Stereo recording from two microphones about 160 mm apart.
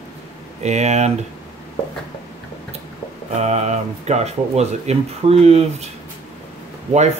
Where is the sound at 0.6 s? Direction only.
45° right (ahead or behind).